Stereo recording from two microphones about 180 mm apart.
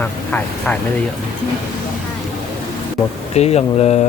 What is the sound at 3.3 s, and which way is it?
Speech, 35° left (ahead or behind).